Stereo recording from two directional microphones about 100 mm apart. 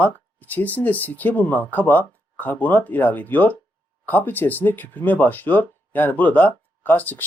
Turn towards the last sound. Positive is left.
turn(degrees=15)  # may be behind; listen again after turning